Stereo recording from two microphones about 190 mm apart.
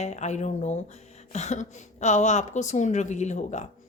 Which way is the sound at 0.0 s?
35° left (ahead or behind).